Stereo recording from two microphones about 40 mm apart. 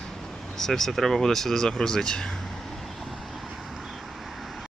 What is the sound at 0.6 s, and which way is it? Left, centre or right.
Speech, centre.